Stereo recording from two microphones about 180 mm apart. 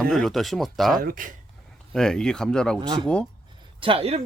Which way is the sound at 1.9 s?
5° left (ahead or behind).